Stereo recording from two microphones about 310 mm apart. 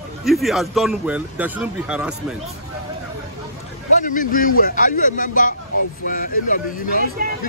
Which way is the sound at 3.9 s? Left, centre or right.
Left.